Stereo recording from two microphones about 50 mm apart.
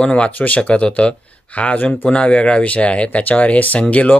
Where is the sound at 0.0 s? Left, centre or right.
Left.